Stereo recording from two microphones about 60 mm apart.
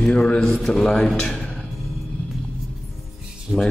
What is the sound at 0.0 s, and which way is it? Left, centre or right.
A man's voice, centre.